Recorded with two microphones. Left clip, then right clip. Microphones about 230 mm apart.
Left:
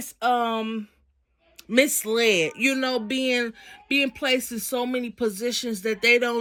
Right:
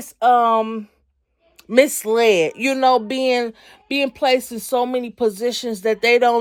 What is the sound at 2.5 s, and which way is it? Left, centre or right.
Speech, centre.